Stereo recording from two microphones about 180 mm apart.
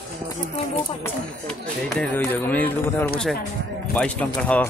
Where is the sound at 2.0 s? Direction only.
10° left (ahead or behind).